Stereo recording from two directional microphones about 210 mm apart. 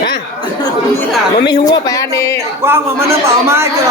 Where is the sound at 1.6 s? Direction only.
15° left (ahead or behind).